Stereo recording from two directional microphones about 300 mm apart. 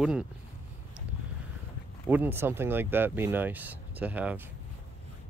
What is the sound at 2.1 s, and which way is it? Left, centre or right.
Speech, centre.